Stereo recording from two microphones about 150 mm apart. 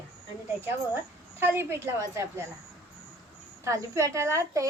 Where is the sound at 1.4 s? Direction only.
15° right (ahead or behind).